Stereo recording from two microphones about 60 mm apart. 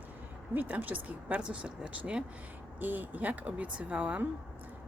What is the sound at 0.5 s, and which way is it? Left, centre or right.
Speech, right.